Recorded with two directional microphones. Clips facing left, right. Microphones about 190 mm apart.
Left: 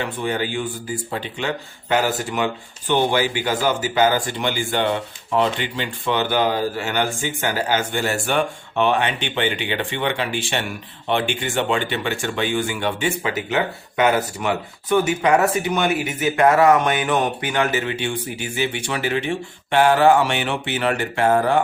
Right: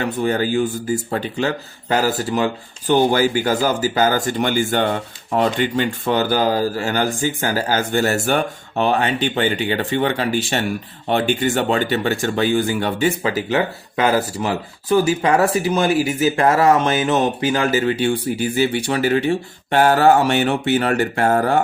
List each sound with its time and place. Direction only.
0.0 s a man's voice: 40° right (ahead or behind)